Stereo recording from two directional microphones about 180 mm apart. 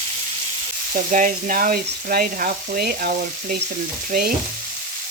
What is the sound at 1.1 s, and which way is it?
Speech, 45° right (ahead or behind).